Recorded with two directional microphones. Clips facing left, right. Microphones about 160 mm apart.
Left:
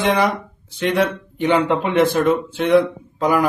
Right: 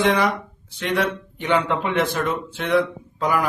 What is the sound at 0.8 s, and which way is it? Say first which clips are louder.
Speech: left 4 dB; 25° left (ahead or behind).